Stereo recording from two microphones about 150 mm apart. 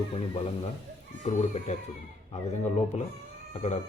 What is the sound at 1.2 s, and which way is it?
Speech, 50° left (ahead or behind).